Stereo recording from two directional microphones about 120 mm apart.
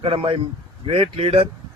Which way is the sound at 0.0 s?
50° right (ahead or behind).